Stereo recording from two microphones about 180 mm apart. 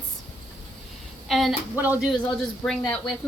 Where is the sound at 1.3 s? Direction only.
Centre (ahead or behind).